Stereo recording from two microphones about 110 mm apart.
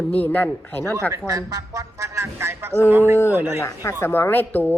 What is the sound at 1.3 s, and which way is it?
Speech, 30° right (ahead or behind).